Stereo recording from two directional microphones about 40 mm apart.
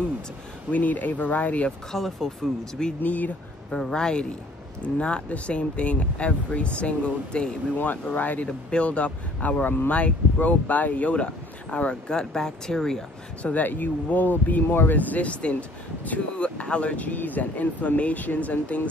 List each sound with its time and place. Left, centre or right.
0.7 s speech: left
1.9 s speech: centre
3.0 s speech: left
3.9 s speech: left
7.7 s speech: left
8.5 s speech: left
8.8 s speech: left
12.2 s speech: centre
13.4 s speech: left
16.9 s speech: left